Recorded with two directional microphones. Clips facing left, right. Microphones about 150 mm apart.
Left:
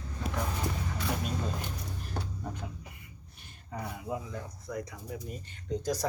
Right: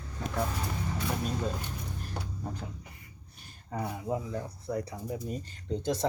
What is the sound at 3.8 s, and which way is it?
Speech, 35° right (ahead or behind).